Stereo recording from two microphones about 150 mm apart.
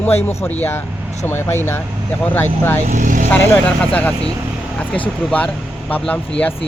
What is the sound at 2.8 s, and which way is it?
Speech, 60° right (ahead or behind).